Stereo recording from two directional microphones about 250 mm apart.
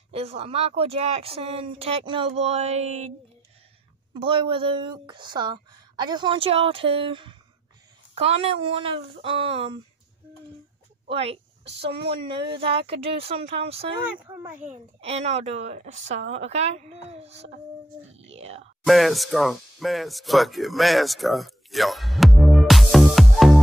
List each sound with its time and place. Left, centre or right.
0.1 s speech: right
4.1 s speech: right
11.1 s a sound: right
12.3 s speech: centre
14.2 s a child's voice: centre
14.6 s speech: right
18.9 s speech: centre